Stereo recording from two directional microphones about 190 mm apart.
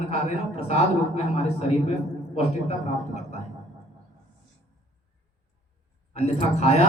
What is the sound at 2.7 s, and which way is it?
Speech, 35° left (ahead or behind).